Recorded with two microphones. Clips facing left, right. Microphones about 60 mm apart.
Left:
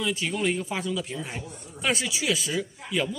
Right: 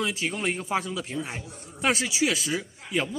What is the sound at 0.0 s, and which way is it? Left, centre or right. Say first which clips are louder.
Speech: left 1 dB; right.